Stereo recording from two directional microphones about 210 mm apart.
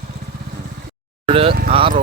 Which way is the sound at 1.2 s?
25° right (ahead or behind).